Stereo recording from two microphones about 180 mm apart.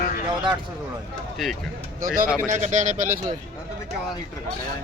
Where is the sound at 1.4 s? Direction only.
Centre (ahead or behind).